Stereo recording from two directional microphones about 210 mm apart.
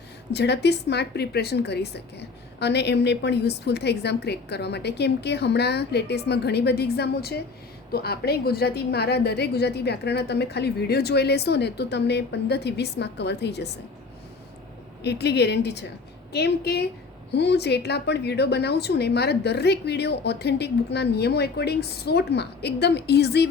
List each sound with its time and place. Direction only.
0.3 s a woman's voice: 55° left (ahead or behind)
15.0 s a woman's voice: 55° left (ahead or behind)